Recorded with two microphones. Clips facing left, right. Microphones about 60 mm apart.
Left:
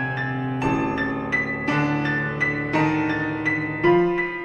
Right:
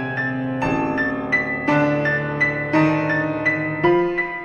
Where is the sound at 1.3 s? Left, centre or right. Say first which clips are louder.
Right 6 dB; right.